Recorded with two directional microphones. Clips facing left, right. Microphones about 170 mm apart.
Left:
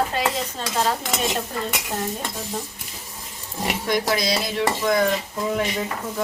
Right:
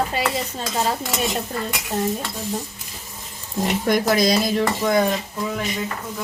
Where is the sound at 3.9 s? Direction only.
50° right (ahead or behind).